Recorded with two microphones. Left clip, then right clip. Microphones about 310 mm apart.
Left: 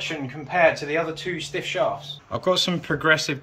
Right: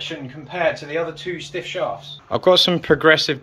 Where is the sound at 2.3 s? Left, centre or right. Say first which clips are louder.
Right 8 dB; centre.